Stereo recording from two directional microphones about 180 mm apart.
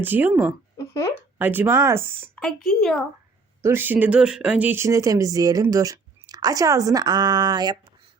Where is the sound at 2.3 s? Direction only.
5° left (ahead or behind).